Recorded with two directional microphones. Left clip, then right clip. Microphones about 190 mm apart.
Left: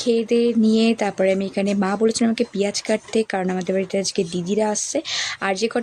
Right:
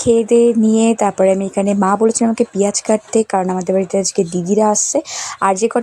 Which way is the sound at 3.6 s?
20° right (ahead or behind).